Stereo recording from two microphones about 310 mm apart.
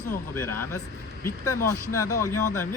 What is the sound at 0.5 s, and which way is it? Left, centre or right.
Speech, left.